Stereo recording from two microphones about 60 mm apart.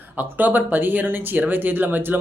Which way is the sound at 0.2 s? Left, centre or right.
Right.